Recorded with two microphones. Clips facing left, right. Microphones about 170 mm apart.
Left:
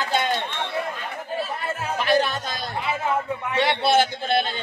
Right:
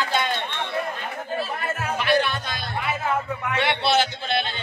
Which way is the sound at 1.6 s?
30° left (ahead or behind).